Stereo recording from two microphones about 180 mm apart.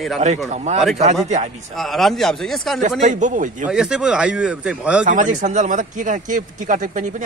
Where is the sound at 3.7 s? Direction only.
5° right (ahead or behind).